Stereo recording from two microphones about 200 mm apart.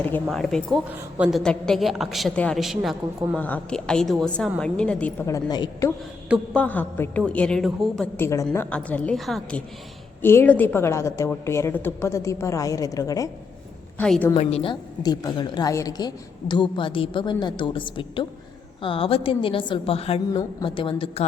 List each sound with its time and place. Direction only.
0.0 s a woman's voice: 5° left (ahead or behind); by 5.9 s 20° left (ahead or behind)
6.5 s a woman's voice: 5° left (ahead or behind)
14.0 s a woman's voice: 5° left (ahead or behind)
14.3 s a woman's voice: 30° left (ahead or behind)